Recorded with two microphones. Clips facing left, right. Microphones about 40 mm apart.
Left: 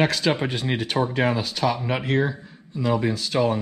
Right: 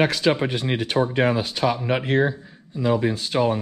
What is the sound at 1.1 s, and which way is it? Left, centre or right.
Speech, right.